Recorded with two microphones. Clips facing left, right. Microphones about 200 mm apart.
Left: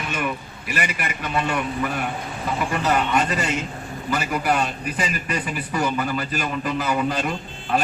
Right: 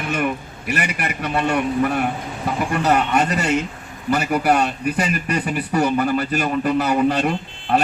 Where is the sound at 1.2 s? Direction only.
50° right (ahead or behind).